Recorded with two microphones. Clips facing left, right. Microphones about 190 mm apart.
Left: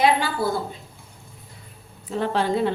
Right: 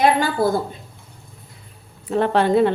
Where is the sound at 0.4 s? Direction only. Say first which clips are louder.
Right 8 dB; 40° right (ahead or behind).